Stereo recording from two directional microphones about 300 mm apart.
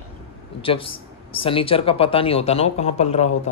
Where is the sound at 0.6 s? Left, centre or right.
Centre.